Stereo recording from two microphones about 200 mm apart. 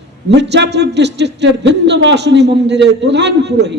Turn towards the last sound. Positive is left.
turn(degrees=-55)  # may be behind; listen again after turning